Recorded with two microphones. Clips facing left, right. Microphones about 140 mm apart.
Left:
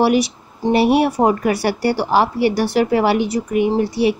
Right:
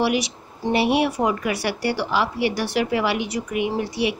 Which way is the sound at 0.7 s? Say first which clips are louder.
Left 5 dB; 45° left (ahead or behind).